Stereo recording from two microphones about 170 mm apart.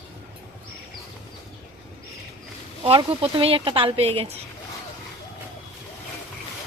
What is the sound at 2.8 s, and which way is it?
A woman's voice, 30° right (ahead or behind).